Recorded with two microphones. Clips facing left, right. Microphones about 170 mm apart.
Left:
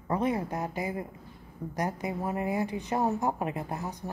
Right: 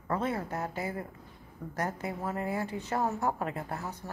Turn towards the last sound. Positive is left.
turn(degrees=15)  # may be behind; listen again after turning